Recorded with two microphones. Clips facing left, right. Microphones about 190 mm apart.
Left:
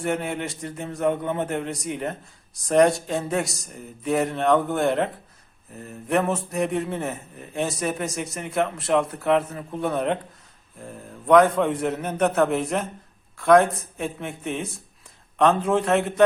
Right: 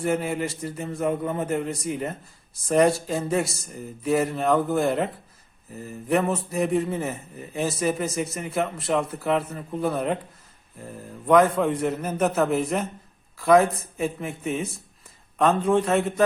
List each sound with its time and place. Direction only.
0.0 s a man's voice: centre (ahead or behind)